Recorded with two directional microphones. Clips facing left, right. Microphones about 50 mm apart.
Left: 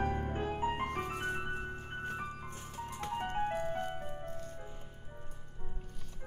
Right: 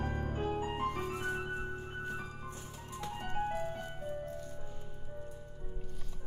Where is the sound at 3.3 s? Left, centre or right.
Left.